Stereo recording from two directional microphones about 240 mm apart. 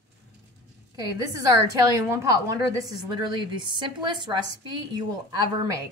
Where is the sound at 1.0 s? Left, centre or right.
Centre.